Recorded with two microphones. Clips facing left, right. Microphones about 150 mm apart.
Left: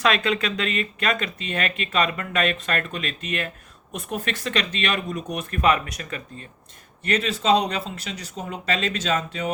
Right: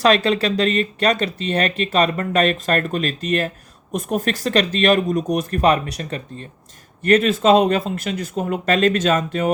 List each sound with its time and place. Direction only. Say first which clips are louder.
0.0 s speech: right 6 dB; 35° right (ahead or behind)
7.0 s speech: right 9 dB; 50° right (ahead or behind)